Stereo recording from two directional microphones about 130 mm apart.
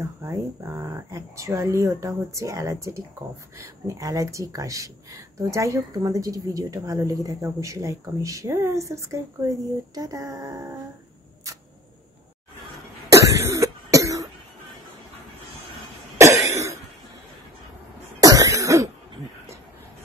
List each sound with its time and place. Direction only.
0.0 s speech: 20° right (ahead or behind)
13.1 s cough: 25° right (ahead or behind)
16.4 s cough: 25° right (ahead or behind)
18.2 s cough: 25° right (ahead or behind)